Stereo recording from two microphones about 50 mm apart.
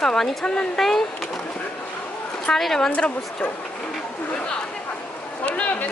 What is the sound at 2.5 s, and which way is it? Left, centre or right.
Speech, centre.